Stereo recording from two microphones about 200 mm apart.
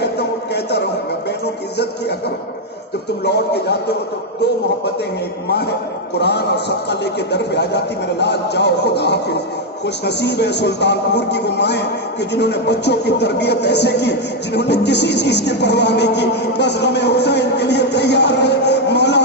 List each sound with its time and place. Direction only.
0.0 s a sound: 55° left (ahead or behind)
3.2 s speech: 55° left (ahead or behind)
6.1 s speech: 60° left (ahead or behind)